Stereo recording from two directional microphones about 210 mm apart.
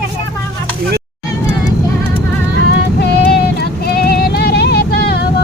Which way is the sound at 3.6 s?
50° left (ahead or behind).